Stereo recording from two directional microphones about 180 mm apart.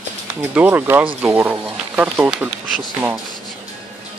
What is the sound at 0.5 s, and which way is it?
Speech, 10° right (ahead or behind).